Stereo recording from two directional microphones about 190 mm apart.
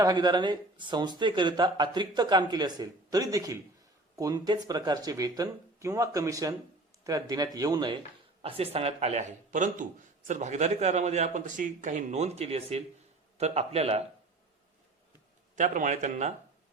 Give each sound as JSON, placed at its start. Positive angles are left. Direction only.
{"t": 0.0, "sound": "speech", "side_deg": -20}
{"t": 15.5, "sound": "speech", "side_deg": -40}